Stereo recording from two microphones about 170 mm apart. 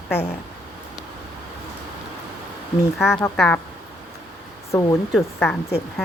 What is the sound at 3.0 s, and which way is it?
Speech, 10° left (ahead or behind).